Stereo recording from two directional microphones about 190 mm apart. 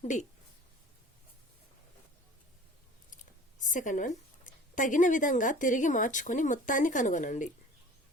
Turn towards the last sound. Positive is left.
turn(degrees=40)  # may be behind; listen again after turning